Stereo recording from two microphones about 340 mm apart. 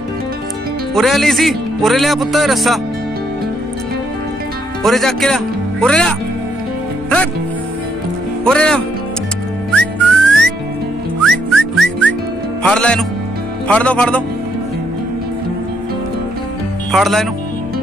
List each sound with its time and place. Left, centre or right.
0.9 s a man's voice: centre
4.8 s speech: centre
8.5 s a man's voice: centre
9.7 s whistling: centre
11.2 s music: centre
12.6 s a man's voice: centre
16.9 s a man's voice: centre